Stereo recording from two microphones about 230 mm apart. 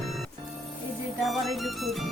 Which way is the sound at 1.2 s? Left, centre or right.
Centre.